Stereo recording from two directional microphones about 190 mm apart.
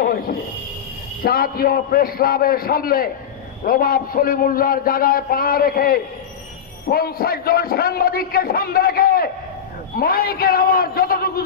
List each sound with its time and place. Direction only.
1.2 s a man's voice: 50° left (ahead or behind)